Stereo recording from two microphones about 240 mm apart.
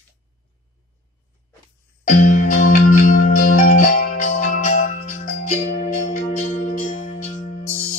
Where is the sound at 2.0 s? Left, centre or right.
Left.